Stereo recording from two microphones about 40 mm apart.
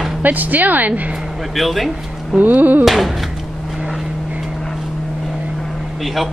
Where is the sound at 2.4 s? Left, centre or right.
Right.